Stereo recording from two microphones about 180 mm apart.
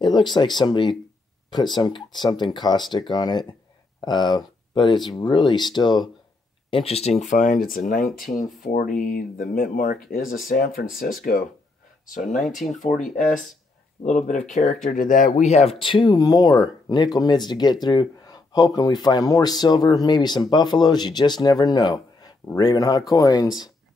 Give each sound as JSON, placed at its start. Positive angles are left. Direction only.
{"t": 0.0, "sound": "speech", "side_deg": 25}
{"t": 12.6, "sound": "speech", "side_deg": 50}
{"t": 16.1, "sound": "speech", "side_deg": 20}